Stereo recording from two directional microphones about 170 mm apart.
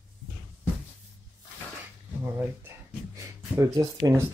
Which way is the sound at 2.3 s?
15° right (ahead or behind).